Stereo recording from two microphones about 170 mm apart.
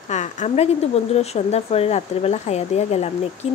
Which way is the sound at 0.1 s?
45° left (ahead or behind).